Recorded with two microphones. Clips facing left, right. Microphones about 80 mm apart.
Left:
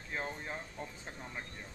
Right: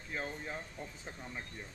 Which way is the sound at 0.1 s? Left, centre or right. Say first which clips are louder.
Left 1 dB; centre.